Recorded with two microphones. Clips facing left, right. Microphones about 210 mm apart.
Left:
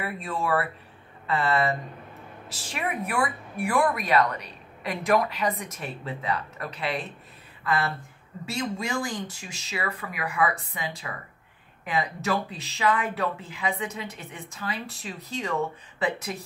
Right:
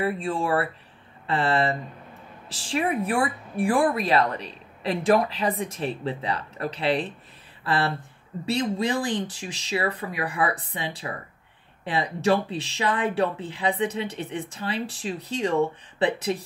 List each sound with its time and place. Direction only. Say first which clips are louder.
0.0 s speech: right 5 dB; 30° right (ahead or behind)